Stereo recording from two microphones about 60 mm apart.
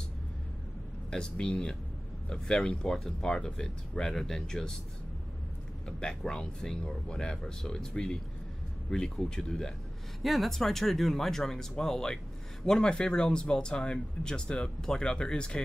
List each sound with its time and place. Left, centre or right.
1.1 s speech: centre
5.9 s speech: centre
10.2 s speech: centre